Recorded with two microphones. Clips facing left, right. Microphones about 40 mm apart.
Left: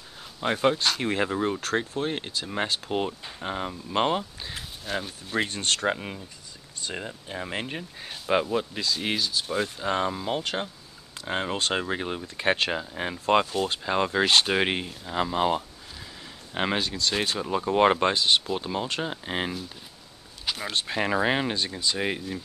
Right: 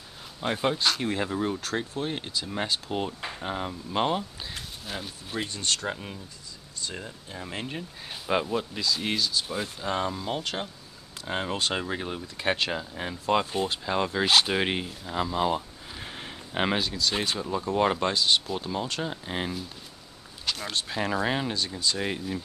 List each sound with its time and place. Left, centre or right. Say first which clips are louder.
0.4 s speech: left 3 dB; centre
1.0 s speech: left 2 dB; left; by 5.1 s centre
5.4 s speech: left 4 dB; left
5.9 s speech: left 3 dB; centre
15.1 s speech: left 2 dB; centre
16.0 s a sound: right 5 dB; right
16.5 s speech: even; centre
17.5 s speech: left 5 dB; left